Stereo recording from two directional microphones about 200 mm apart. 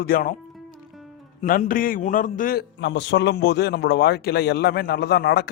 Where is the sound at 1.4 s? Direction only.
45° left (ahead or behind).